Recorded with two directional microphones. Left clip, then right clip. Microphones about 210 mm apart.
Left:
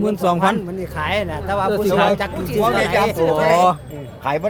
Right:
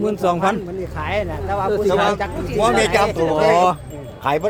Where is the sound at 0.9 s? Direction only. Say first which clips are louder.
Left 2 dB; 45° left (ahead or behind).